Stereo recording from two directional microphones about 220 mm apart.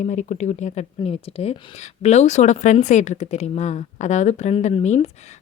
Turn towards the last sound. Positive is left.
turn(degrees=30)  # may be behind; listen again after turning